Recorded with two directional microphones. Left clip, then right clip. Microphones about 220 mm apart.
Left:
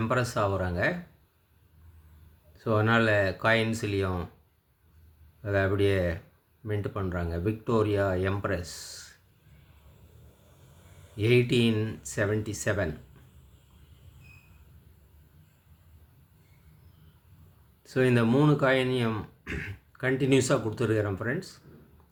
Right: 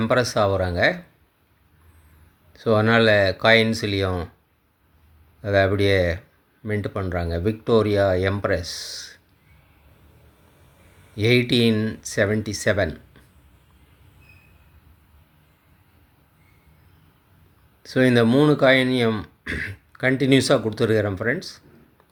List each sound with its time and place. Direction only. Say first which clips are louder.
0.0 s speech: right 8 dB; 25° right (ahead or behind)
2.6 s speech: right 7 dB; 25° right (ahead or behind)
5.4 s speech: right 7 dB; 25° right (ahead or behind)
11.2 s speech: right 5 dB; 25° right (ahead or behind)
17.8 s speech: right 7 dB; 25° right (ahead or behind)